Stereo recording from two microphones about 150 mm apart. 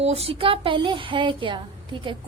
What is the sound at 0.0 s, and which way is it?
Speech, 40° right (ahead or behind).